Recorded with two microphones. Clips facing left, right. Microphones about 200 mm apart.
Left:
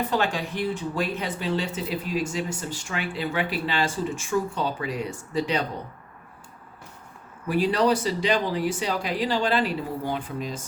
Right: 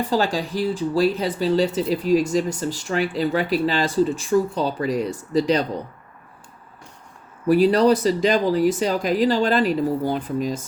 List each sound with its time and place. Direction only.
0.1 s speech: 35° right (ahead or behind)
7.4 s speech: 40° right (ahead or behind)